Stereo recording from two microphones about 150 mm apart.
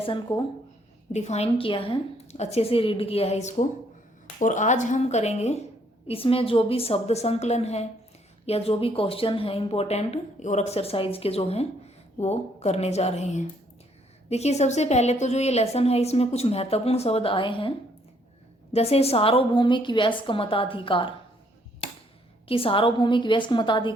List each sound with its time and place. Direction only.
0.0 s a woman's voice: 30° left (ahead or behind)
1.1 s a woman's voice: 50° left (ahead or behind)
22.4 s a woman's voice: 40° left (ahead or behind)